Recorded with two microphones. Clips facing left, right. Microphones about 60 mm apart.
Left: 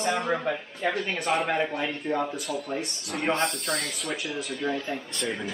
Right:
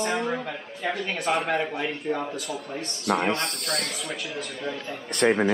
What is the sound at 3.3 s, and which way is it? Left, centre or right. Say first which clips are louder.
Speech: left 2 dB; right.